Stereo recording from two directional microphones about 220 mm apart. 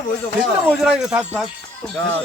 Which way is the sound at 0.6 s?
5° right (ahead or behind).